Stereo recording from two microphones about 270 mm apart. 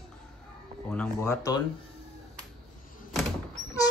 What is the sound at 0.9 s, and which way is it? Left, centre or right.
Speech, centre.